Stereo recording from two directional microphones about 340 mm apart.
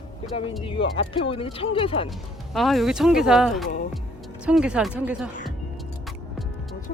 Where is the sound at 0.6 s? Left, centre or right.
Centre.